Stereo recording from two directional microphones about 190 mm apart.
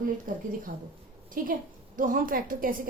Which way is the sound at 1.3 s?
45° right (ahead or behind).